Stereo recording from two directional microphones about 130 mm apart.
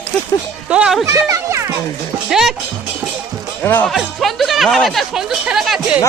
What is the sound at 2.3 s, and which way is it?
Music, 5° right (ahead or behind).